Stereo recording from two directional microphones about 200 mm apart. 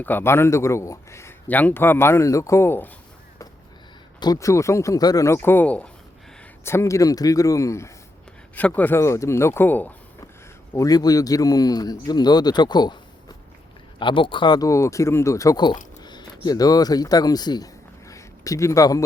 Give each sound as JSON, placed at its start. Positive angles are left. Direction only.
{"t": 0.0, "sound": "speech", "side_deg": 10}
{"t": 4.2, "sound": "a man's voice", "side_deg": 15}
{"t": 18.1, "sound": "a sound", "side_deg": 15}